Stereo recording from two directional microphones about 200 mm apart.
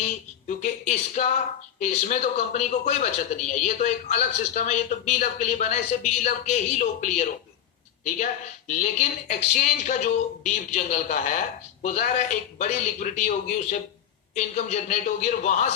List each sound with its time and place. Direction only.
0.4 s speech: 40° left (ahead or behind)